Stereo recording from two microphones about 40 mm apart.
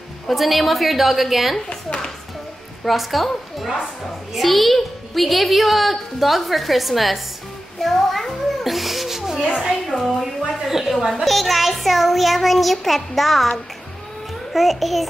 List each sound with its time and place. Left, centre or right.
0.3 s a woman's voice: centre
1.7 s a sound: left
2.8 s a woman's voice: centre
7.8 s children playing: centre
9.7 s speech: centre
10.7 s a woman's voice: centre